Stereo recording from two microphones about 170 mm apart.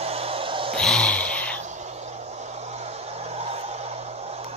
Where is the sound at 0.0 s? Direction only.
35° right (ahead or behind).